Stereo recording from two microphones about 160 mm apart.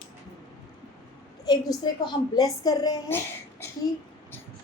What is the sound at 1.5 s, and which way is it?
A woman's voice, 25° left (ahead or behind).